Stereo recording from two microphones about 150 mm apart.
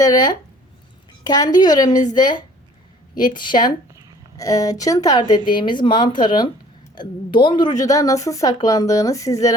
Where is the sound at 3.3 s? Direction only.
30° left (ahead or behind).